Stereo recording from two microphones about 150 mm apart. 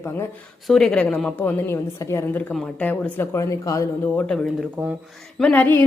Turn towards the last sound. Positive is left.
turn(degrees=15)  # may be behind; listen again after turning